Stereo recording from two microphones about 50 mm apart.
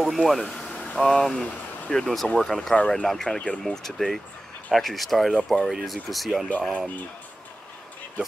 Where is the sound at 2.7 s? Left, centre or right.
Centre.